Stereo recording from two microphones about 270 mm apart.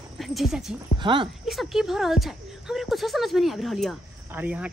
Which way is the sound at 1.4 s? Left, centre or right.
Centre.